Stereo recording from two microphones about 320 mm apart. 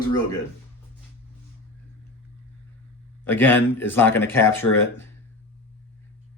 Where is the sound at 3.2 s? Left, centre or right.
Centre.